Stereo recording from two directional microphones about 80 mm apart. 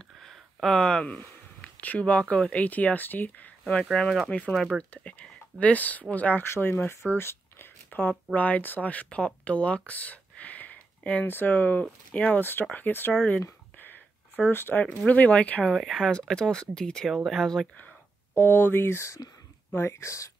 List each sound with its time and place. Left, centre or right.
0.2 s speech: centre; by 3.5 s left
3.8 s speech: centre
4.9 s speech: centre
6.4 s speech: left
13.1 s speech: centre
13.7 s a sound: left
14.4 s speech: left
15.7 s speech: centre
17.7 s speech: left